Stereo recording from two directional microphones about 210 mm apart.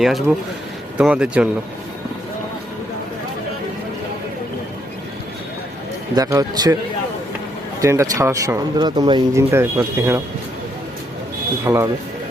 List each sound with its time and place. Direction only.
0.0 s speech: centre (ahead or behind)
6.1 s speech: 15° right (ahead or behind)
7.8 s speech: 15° right (ahead or behind)
11.6 s speech: 15° right (ahead or behind)